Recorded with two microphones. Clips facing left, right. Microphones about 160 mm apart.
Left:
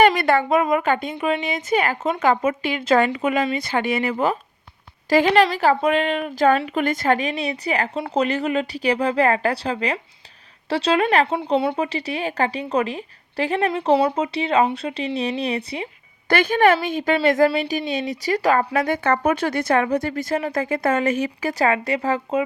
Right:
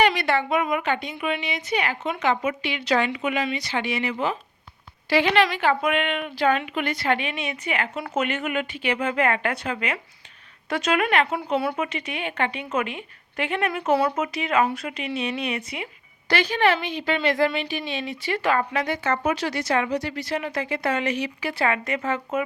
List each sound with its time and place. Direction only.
0.0 s a woman's voice: 50° left (ahead or behind)
1.1 s a woman's voice: 35° left (ahead or behind)
16.3 s a woman's voice: 50° left (ahead or behind); by 22.4 s 35° left (ahead or behind)